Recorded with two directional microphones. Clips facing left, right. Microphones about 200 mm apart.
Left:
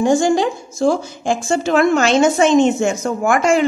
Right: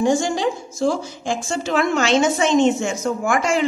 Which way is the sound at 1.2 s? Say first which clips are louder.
Left 7 dB; 50° left (ahead or behind).